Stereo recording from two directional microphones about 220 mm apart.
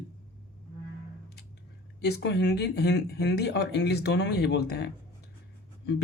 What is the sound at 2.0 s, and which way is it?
Speech, 50° left (ahead or behind).